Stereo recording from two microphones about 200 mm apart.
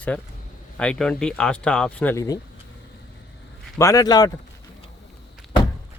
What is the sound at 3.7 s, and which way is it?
Speech, 15° left (ahead or behind).